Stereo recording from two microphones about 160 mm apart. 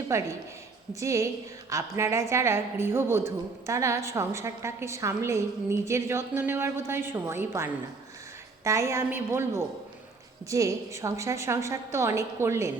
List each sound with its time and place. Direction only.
0.1 s a woman's voice: 20° right (ahead or behind)